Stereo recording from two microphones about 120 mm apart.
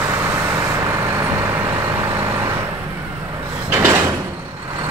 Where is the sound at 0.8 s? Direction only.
25° right (ahead or behind).